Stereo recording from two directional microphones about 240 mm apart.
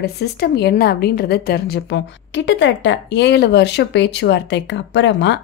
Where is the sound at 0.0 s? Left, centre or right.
Left.